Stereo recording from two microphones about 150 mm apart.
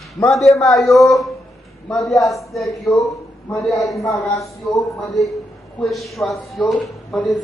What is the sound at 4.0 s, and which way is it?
Speech, 20° left (ahead or behind).